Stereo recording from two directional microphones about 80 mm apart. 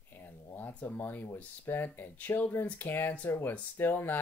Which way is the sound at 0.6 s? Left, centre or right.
Left.